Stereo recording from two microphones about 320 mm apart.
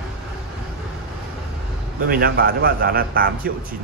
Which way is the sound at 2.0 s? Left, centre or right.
Right.